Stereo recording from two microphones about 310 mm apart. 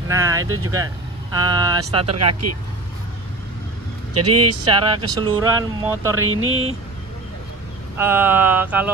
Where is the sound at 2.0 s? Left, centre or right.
Right.